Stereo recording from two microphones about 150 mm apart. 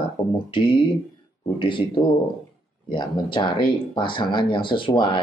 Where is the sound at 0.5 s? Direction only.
35° left (ahead or behind).